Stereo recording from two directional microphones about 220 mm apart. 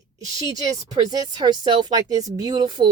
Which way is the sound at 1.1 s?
20° right (ahead or behind).